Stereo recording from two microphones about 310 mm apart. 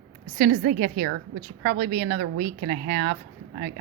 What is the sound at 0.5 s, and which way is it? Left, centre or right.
Speech, right.